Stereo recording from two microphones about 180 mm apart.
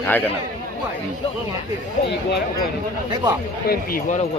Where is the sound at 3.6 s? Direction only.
55° left (ahead or behind).